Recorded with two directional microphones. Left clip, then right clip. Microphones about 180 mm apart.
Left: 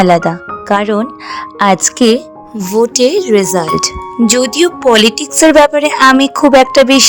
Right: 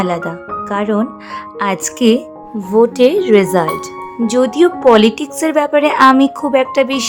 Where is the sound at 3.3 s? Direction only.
Centre (ahead or behind).